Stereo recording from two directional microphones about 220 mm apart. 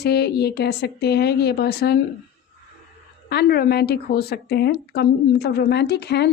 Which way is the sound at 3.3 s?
45° left (ahead or behind).